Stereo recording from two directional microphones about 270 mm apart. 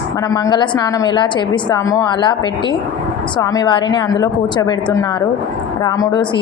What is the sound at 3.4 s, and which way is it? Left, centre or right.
A woman's voice, centre.